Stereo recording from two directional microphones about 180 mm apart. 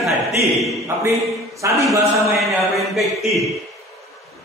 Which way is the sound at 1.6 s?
15° right (ahead or behind).